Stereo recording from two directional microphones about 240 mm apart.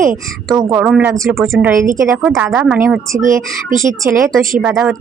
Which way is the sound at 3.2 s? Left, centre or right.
Right.